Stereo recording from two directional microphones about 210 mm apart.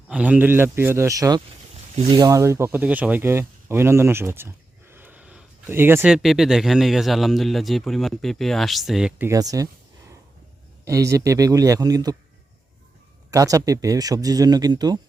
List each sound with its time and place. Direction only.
0.1 s speech: 5° right (ahead or behind)
1.7 s a sound: 30° right (ahead or behind)
2.1 s speech: 15° right (ahead or behind)
10.8 s speech: 15° right (ahead or behind)
13.3 s speech: 15° right (ahead or behind)